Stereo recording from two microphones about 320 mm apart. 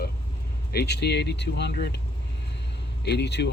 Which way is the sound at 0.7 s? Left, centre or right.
Left.